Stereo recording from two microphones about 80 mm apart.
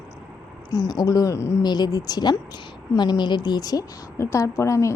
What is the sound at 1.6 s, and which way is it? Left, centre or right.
Speech, left.